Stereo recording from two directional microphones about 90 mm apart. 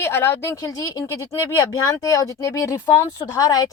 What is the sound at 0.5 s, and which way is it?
Speech, 40° left (ahead or behind).